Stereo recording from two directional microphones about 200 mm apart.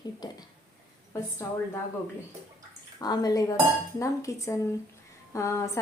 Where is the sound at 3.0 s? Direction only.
20° left (ahead or behind).